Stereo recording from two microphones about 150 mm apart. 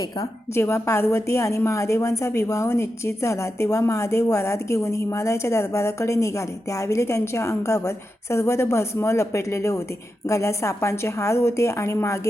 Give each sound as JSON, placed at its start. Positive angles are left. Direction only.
{"t": 0.2, "sound": "a woman's voice", "side_deg": 20}